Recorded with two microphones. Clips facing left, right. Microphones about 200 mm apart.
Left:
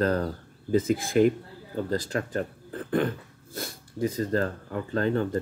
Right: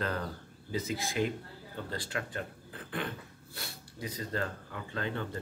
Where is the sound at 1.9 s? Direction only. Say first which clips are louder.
Left 9 dB; 40° left (ahead or behind).